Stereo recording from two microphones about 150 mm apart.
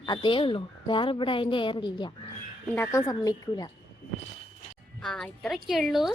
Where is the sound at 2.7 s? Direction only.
15° left (ahead or behind).